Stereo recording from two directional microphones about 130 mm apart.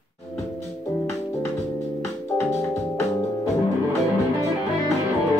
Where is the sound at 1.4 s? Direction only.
20° left (ahead or behind).